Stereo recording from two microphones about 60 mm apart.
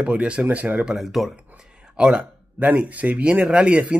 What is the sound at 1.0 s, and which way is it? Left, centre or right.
Speech, centre.